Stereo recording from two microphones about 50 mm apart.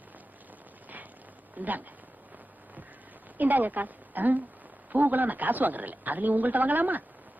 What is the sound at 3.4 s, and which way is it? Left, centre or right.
A woman's voice, right.